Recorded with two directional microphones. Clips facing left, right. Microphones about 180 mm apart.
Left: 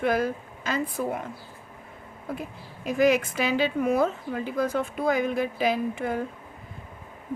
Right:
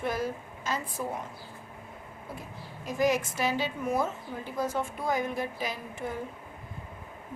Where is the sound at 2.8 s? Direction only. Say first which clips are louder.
Left 5 dB; 60° left (ahead or behind).